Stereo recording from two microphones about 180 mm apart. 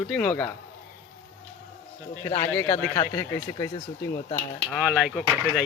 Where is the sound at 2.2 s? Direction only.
15° left (ahead or behind).